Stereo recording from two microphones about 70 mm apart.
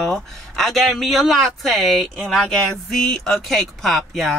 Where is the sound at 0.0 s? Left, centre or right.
Centre.